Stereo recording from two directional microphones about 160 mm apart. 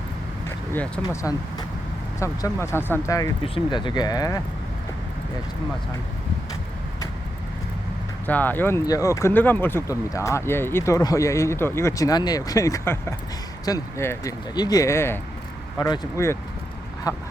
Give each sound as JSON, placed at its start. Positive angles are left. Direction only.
{"t": 0.7, "sound": "speech", "side_deg": 10}
{"t": 1.2, "sound": "speech", "side_deg": 25}
{"t": 3.4, "sound": "speech", "side_deg": 30}
{"t": 8.3, "sound": "speech", "side_deg": 10}
{"t": 17.1, "sound": "duck", "side_deg": 25}